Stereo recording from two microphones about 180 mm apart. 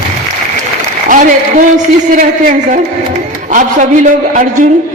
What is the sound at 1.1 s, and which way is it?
A woman's voice, 45° right (ahead or behind).